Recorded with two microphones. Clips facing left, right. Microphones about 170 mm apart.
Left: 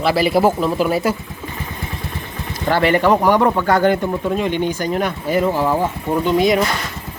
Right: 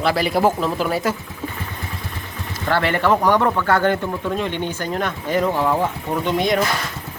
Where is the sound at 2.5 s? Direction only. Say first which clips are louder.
Left 4 dB; 15° left (ahead or behind).